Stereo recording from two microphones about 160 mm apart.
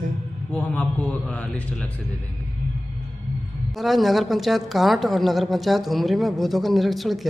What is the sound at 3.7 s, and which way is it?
A woman's voice, centre (ahead or behind).